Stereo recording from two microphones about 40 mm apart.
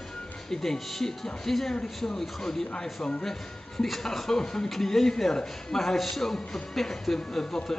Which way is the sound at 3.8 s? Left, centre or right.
Centre.